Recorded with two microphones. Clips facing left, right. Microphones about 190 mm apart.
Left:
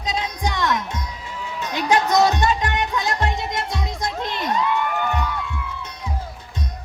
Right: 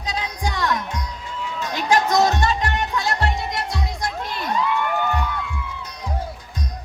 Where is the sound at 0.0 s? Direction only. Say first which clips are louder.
Left 2 dB; 20° left (ahead or behind).